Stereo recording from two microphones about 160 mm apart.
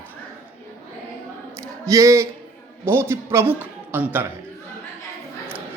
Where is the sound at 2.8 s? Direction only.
15° right (ahead or behind).